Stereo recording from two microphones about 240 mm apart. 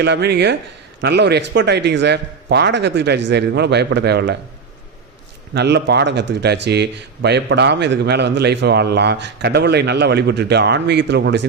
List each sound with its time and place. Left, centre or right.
0.0 s a man's voice: right
5.5 s a man's voice: right